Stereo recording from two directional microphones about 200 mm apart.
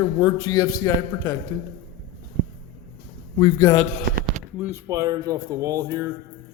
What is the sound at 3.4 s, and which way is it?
Speech, 15° left (ahead or behind).